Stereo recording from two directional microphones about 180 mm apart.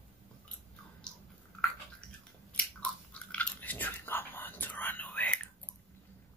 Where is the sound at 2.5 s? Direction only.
5° left (ahead or behind).